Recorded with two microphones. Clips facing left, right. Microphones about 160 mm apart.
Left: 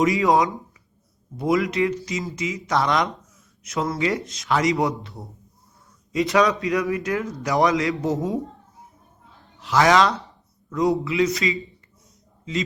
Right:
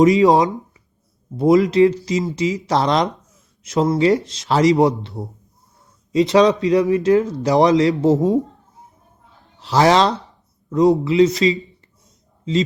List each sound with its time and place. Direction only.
0.0 s speech: 20° right (ahead or behind)
9.6 s a man's voice: 30° right (ahead or behind)